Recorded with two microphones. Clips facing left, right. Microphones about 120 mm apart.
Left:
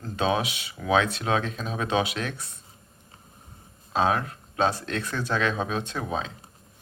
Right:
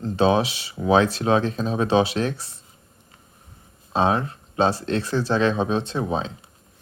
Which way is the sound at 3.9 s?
25° right (ahead or behind).